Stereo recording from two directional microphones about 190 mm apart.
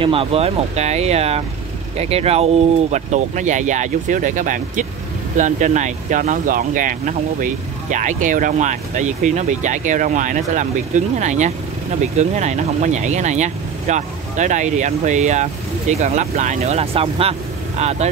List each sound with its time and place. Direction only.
0.0 s speech: 30° right (ahead or behind)